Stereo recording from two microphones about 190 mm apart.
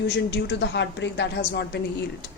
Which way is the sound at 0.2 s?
65° left (ahead or behind).